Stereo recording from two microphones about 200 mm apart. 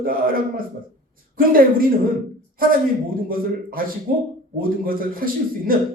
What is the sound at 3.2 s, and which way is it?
A man's voice, 45° right (ahead or behind).